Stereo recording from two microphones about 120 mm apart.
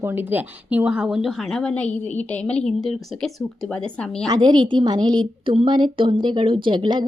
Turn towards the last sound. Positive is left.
turn(degrees=-40)  # may be behind; listen again after turning